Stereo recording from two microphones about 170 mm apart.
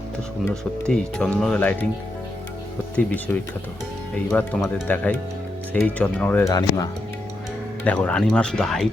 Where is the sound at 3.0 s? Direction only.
10° left (ahead or behind).